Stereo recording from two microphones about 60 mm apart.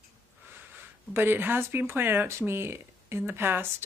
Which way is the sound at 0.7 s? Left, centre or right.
Right.